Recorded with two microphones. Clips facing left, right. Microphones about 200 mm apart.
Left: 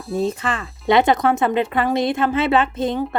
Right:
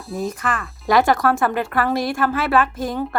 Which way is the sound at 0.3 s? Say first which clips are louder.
Left 1 dB; 25° left (ahead or behind).